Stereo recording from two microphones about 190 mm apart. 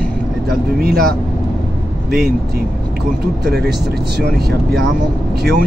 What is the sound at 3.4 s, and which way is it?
Speech, 60° right (ahead or behind).